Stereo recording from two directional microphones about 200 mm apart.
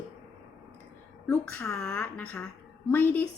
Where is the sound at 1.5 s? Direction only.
15° left (ahead or behind).